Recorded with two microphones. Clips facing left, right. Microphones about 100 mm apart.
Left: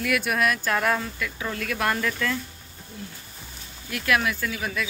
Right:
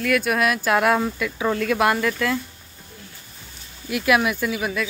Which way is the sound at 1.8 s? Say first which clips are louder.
Right 5 dB; 10° right (ahead or behind).